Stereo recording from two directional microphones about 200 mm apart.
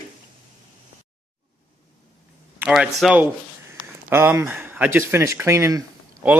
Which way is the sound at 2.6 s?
5° right (ahead or behind).